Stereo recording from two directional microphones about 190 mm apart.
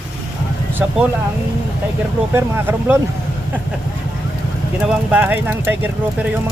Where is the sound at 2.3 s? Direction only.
10° right (ahead or behind).